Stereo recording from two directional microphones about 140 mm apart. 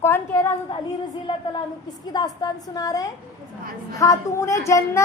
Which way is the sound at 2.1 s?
30° left (ahead or behind).